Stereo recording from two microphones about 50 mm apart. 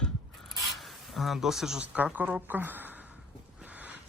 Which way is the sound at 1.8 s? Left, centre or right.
Right.